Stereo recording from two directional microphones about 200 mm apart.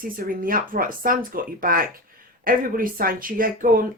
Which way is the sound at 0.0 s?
45° right (ahead or behind).